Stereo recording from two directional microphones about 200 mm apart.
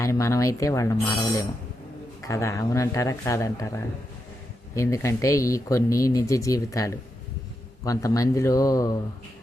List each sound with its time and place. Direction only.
0.0 s speech: 15° left (ahead or behind)